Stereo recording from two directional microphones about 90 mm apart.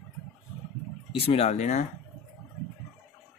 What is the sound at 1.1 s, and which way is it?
Speech, 90° left.